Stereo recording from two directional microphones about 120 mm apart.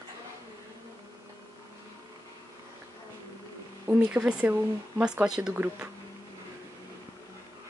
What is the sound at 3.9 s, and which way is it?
Speech, 15° right (ahead or behind).